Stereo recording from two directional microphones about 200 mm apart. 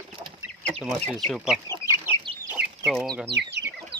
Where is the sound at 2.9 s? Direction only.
Centre (ahead or behind).